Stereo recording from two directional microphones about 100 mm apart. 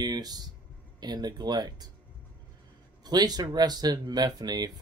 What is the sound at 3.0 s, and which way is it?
Speech, 45° right (ahead or behind).